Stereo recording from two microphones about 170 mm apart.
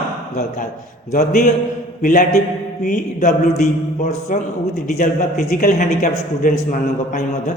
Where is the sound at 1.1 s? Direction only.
45° left (ahead or behind).